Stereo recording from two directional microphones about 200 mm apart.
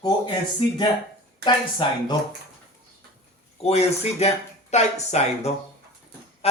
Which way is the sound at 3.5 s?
30° left (ahead or behind).